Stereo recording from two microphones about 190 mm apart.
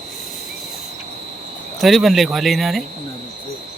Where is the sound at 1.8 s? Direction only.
Centre (ahead or behind).